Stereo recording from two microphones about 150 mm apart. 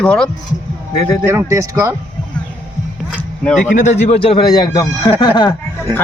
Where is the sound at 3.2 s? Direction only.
10° left (ahead or behind).